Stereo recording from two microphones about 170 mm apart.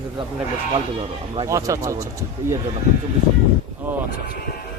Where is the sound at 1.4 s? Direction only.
20° right (ahead or behind).